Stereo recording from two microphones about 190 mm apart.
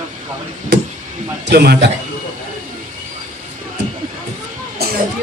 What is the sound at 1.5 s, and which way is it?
Speech, 60° right (ahead or behind).